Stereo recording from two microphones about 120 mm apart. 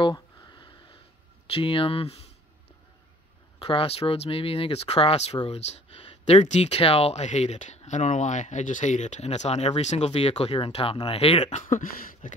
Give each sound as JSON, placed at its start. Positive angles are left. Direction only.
{"t": 0.0, "sound": "a sound", "side_deg": 40}
{"t": 1.5, "sound": "speech", "side_deg": 50}
{"t": 3.6, "sound": "speech", "side_deg": 55}
{"t": 11.5, "sound": "speech", "side_deg": 90}